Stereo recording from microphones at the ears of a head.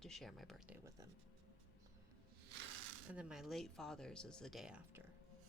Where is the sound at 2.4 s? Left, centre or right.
Right.